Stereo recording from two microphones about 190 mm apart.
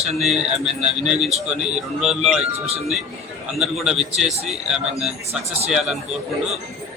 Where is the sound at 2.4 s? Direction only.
35° right (ahead or behind).